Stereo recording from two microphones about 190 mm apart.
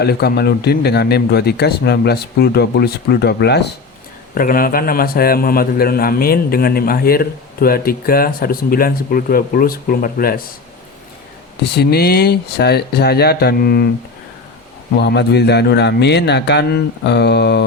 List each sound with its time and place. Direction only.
0.0 s speech: 55° left (ahead or behind)
4.4 s a man's voice: 50° left (ahead or behind)
11.6 s speech: 60° left (ahead or behind)
14.9 s speech: 60° left (ahead or behind)